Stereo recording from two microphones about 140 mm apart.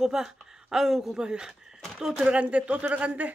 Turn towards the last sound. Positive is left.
turn(degrees=-10)  # may be behind; listen again after turning